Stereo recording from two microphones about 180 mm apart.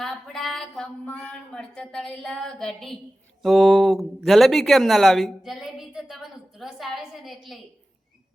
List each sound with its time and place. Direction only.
0.0 s speech: centre (ahead or behind)